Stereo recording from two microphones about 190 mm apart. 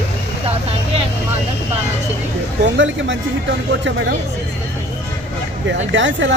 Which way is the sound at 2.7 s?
80° right.